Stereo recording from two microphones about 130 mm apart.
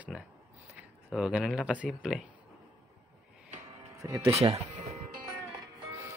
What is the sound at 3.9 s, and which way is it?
Speech, 25° right (ahead or behind).